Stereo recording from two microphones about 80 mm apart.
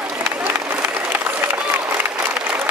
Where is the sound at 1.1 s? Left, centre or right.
Right.